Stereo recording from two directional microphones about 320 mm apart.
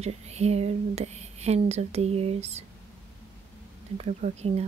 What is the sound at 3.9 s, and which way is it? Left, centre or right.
Speech, centre.